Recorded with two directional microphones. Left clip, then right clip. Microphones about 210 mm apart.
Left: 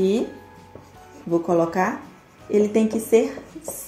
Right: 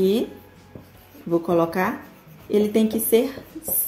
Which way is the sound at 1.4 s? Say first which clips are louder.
Left 1 dB; 10° right (ahead or behind).